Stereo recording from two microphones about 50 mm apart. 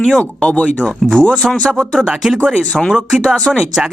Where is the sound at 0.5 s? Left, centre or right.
Left.